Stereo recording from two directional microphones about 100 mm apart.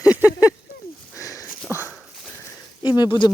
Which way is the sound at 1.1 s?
35° left (ahead or behind).